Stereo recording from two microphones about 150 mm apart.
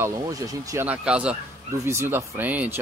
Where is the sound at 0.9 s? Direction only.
5° right (ahead or behind).